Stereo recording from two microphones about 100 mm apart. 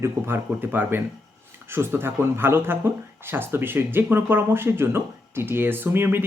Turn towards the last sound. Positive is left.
turn(degrees=-20)  # may be behind; listen again after turning